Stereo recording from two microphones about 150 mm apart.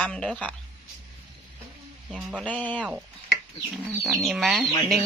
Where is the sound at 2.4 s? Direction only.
10° left (ahead or behind).